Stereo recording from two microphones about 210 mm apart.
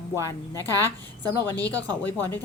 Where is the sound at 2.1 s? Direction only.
10° left (ahead or behind).